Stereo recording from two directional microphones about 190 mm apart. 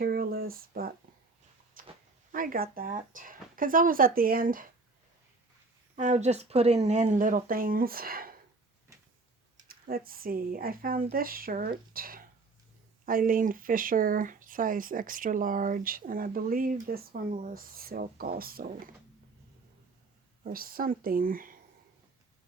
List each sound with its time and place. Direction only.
0.0 s a sound: 50° right (ahead or behind)
2.3 s speech: 45° right (ahead or behind)
6.0 s speech: 40° right (ahead or behind)
9.6 s speech: 50° right (ahead or behind)
20.4 s speech: 50° right (ahead or behind)